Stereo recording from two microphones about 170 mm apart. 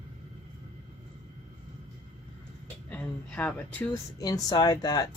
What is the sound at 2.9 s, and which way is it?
Speech, 10° left (ahead or behind).